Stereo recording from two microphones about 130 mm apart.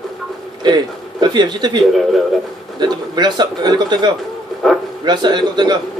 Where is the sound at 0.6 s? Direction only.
35° right (ahead or behind).